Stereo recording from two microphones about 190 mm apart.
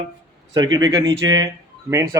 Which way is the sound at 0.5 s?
20° right (ahead or behind).